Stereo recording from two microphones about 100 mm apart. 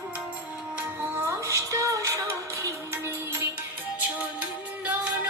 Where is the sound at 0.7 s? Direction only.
25° right (ahead or behind).